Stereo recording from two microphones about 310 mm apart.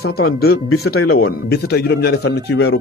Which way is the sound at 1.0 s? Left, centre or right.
Left.